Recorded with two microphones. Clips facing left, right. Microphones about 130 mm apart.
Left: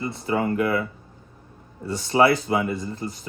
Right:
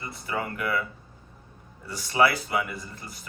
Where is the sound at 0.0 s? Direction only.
30° left (ahead or behind).